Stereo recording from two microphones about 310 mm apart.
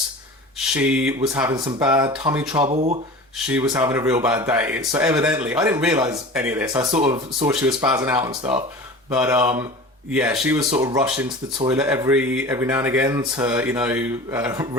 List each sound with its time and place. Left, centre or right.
0.7 s speech: centre; by 3.0 s right
3.3 s speech: centre